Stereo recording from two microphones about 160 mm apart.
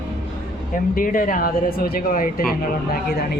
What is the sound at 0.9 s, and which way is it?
Speech, 60° left (ahead or behind).